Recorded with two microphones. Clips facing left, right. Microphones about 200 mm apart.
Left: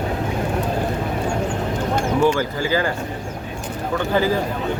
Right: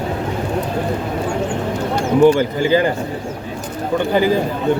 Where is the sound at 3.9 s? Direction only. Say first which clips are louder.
Right 4 dB; 15° right (ahead or behind).